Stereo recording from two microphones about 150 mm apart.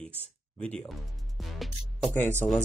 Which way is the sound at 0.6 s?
10° left (ahead or behind).